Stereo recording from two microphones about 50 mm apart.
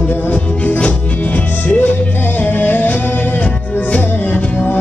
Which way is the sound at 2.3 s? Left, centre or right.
Left.